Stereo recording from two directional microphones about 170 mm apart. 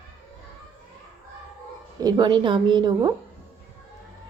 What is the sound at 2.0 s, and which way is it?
A woman's voice, 25° right (ahead or behind).